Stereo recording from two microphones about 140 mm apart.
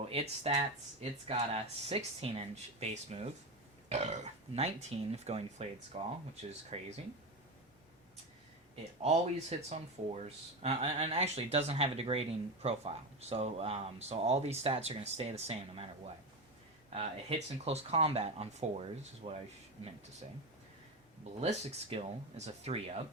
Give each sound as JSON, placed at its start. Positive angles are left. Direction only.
{"t": 0.1, "sound": "speech", "side_deg": -45}
{"t": 9.0, "sound": "speech", "side_deg": -50}
{"t": 16.9, "sound": "speech", "side_deg": -45}
{"t": 21.4, "sound": "speech", "side_deg": -50}